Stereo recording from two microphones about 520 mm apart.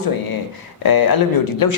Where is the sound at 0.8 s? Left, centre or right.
Left.